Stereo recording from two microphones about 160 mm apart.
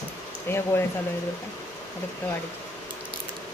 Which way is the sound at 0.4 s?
15° left (ahead or behind).